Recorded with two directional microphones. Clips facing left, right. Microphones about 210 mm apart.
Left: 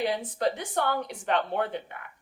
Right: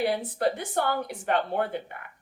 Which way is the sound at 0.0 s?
10° right (ahead or behind).